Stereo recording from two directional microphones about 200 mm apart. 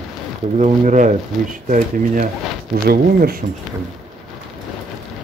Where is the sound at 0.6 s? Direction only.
35° right (ahead or behind).